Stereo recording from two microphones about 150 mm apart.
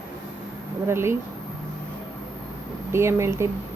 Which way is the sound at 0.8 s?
15° right (ahead or behind).